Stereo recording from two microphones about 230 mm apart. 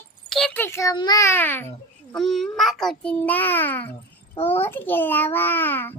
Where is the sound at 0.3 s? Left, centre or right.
Centre.